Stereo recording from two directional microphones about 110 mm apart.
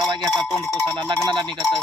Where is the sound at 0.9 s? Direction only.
40° right (ahead or behind).